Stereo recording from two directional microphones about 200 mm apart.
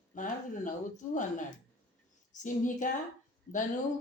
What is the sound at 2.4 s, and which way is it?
Speech, 40° left (ahead or behind).